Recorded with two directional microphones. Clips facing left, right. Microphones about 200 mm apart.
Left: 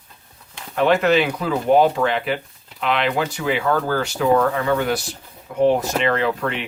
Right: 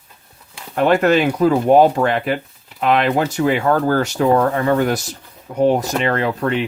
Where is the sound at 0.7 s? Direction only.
45° right (ahead or behind).